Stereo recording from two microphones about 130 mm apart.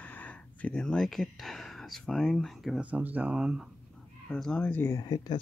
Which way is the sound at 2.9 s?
10° right (ahead or behind).